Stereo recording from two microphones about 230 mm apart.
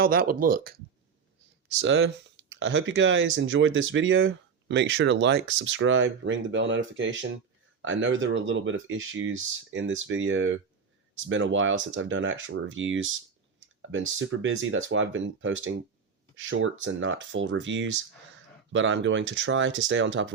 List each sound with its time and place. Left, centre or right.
0.0 s speech: right
1.8 s speech: right